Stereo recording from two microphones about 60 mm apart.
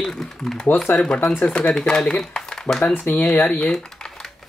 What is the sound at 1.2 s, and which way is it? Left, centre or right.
Speech, left.